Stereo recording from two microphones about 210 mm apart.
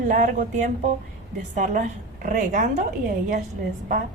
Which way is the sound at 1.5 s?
35° right (ahead or behind).